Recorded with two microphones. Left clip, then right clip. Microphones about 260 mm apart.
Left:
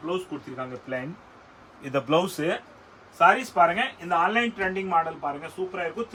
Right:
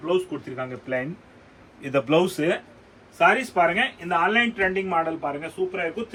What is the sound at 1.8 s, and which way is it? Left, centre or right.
A man's voice, centre.